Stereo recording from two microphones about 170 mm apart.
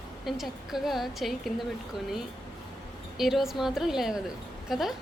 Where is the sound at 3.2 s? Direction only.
Centre (ahead or behind).